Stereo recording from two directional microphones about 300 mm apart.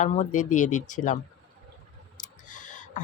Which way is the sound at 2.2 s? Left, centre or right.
Left.